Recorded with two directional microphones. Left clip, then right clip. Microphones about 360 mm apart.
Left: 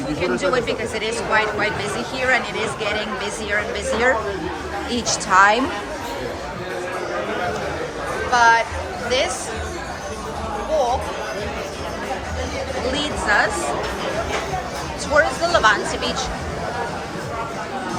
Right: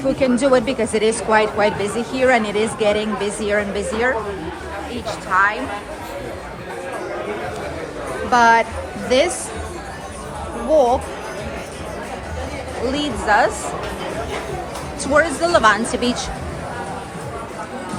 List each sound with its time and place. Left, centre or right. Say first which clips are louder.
0.2 s a woman's voice: right 3 dB; centre
5.3 s speech: left 3 dB; centre
8.3 s a sound: right 2 dB; centre
9.0 s speech: right 4 dB; centre
12.9 s a woman's voice: right 2 dB; centre
15.1 s speech: right 2 dB; centre